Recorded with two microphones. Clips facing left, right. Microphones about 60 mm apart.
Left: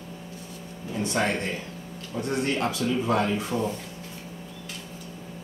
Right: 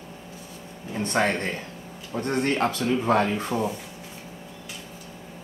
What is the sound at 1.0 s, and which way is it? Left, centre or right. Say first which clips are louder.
Speech: right 2 dB; right.